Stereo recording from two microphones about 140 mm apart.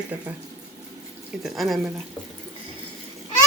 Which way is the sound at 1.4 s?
Centre (ahead or behind).